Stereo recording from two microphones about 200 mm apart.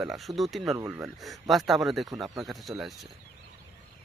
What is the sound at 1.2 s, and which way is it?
Speech, centre (ahead or behind).